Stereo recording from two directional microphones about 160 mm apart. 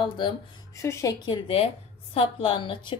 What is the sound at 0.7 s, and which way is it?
A woman's voice, 20° left (ahead or behind).